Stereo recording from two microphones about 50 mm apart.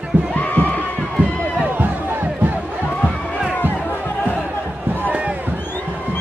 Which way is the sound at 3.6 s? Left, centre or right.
Left.